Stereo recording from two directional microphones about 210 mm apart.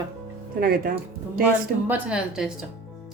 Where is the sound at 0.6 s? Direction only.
45° right (ahead or behind).